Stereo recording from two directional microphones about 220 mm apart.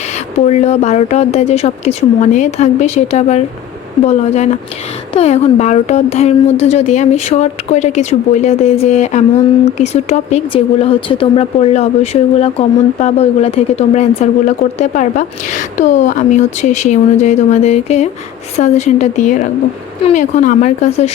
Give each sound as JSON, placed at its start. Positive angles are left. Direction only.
{"t": 0.3, "sound": "speech", "side_deg": 30}